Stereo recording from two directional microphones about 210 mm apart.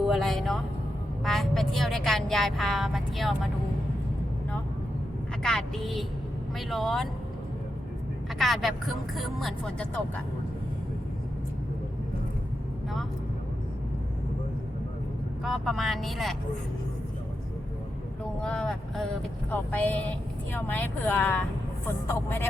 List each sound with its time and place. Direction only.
0.0 s a woman's voice: centre (ahead or behind)
5.4 s speech: 5° left (ahead or behind)
8.4 s speech: centre (ahead or behind)
15.4 s speech: centre (ahead or behind)
18.4 s speech: 5° left (ahead or behind)